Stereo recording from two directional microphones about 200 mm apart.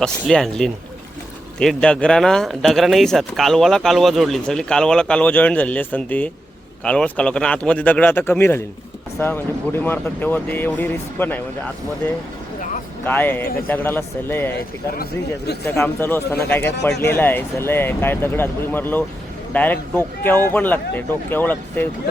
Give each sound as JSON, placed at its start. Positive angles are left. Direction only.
{"t": 0.0, "sound": "speech", "side_deg": 0}
{"t": 13.1, "sound": "speech", "side_deg": 10}
{"t": 15.7, "sound": "speech", "side_deg": 10}